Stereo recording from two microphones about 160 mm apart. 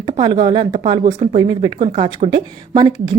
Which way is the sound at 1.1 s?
45° right (ahead or behind).